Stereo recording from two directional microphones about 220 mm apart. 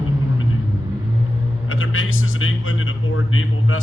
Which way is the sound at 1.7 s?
65° left (ahead or behind).